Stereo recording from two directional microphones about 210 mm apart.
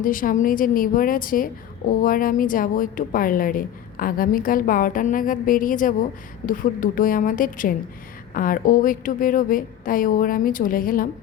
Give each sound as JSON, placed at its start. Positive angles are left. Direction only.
{"t": 0.0, "sound": "a woman's voice", "side_deg": 40}